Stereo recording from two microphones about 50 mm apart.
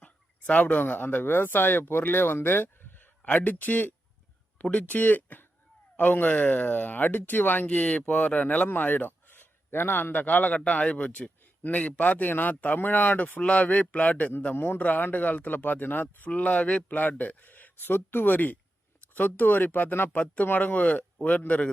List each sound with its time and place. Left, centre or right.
0.0 s speech: left
3.2 s speech: left
10.1 s speech: left
14.5 s a man's voice: left
14.8 s speech: left
16.3 s speech: left
17.0 s speech: left